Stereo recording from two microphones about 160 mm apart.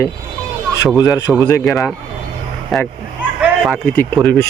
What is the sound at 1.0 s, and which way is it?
Speech, 20° left (ahead or behind).